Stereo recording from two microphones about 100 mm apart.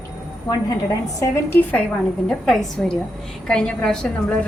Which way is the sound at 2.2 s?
5° left (ahead or behind).